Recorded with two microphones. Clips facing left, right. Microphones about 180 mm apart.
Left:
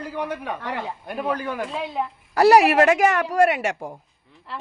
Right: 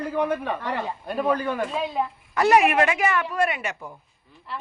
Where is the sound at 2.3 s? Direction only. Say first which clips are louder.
Left 4 dB; 35° left (ahead or behind).